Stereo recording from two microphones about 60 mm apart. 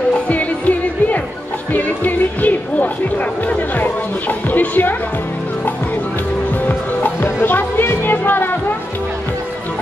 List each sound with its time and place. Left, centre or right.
0.3 s music: left
6.6 s music: left